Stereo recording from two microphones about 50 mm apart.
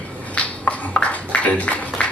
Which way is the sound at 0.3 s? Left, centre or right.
Left.